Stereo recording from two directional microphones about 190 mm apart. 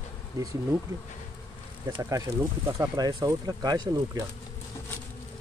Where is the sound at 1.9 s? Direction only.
15° right (ahead or behind).